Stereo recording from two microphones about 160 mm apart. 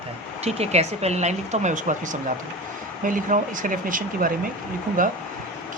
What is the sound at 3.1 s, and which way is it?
Speech, 55° right (ahead or behind).